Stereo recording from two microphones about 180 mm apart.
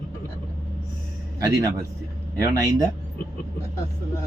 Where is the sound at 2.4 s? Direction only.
20° right (ahead or behind).